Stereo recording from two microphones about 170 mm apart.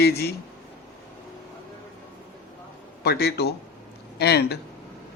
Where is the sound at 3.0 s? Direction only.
70° left (ahead or behind).